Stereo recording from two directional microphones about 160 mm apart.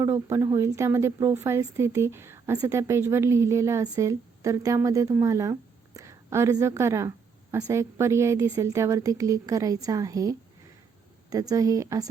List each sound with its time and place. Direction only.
0.0 s a woman's voice: 15° right (ahead or behind)